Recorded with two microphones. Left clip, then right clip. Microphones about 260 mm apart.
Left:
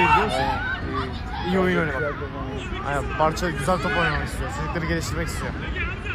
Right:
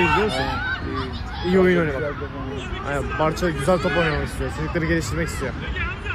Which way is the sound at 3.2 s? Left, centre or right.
Left.